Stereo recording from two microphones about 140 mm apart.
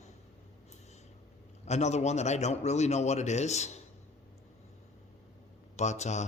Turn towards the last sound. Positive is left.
turn(degrees=55)  # may be behind; listen again after turning